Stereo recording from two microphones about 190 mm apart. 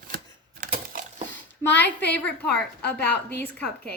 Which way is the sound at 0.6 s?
45° right (ahead or behind).